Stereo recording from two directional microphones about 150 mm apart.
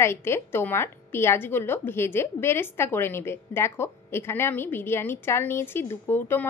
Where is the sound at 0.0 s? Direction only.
15° left (ahead or behind).